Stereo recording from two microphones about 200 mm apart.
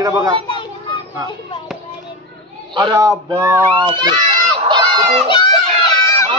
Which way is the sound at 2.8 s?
20° right (ahead or behind).